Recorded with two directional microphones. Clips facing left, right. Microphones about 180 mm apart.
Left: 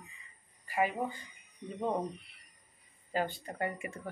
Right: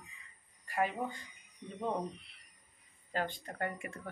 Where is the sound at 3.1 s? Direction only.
5° left (ahead or behind).